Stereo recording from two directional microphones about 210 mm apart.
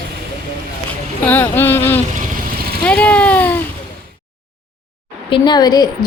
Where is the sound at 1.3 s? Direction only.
10° left (ahead or behind).